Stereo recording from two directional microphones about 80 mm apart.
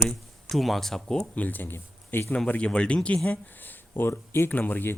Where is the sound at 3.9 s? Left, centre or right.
Left.